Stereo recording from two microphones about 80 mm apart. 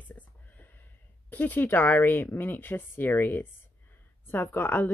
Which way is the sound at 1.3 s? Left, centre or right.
Left.